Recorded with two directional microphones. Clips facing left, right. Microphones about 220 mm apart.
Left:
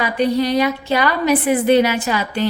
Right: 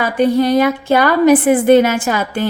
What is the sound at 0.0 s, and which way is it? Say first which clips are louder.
A woman's voice: right 4 dB; 50° right (ahead or behind).